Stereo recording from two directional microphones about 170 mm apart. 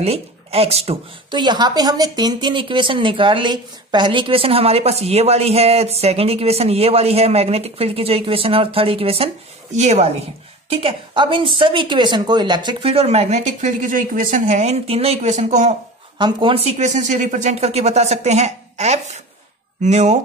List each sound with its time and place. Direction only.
0.0 s speech: 35° right (ahead or behind)
16.2 s speech: 30° right (ahead or behind)